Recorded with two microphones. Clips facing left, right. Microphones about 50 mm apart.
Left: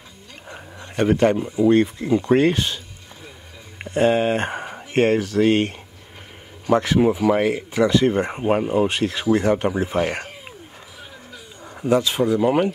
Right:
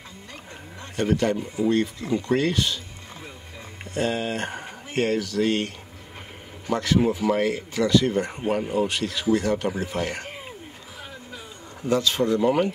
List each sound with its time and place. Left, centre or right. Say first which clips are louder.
0.5 s speech: left 3 dB; left
3.8 s speech: left 8 dB; left
6.7 s speech: left 5 dB; left
11.8 s speech: left 4 dB; centre